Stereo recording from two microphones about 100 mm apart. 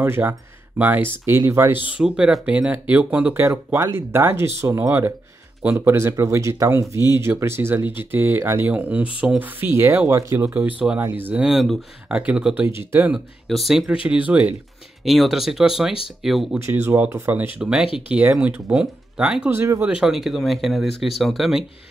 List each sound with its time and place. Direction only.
0.0 s speech: 25° right (ahead or behind)
1.9 s speech: 10° right (ahead or behind)
3.3 s speech: 25° right (ahead or behind)
11.4 s speech: 5° right (ahead or behind)
13.1 s speech: centre (ahead or behind)
15.0 s speech: centre (ahead or behind)
16.5 s speech: 25° right (ahead or behind)
17.6 s speech: 10° right (ahead or behind)
19.5 s speech: 25° right (ahead or behind)
19.9 s speech: 5° right (ahead or behind)